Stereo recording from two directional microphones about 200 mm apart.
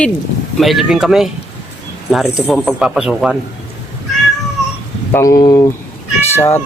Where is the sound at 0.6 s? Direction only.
Centre (ahead or behind).